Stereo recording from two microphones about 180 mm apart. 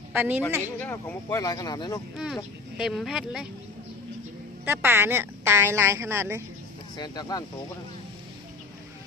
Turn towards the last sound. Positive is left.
turn(degrees=20)  # may be behind; listen again after turning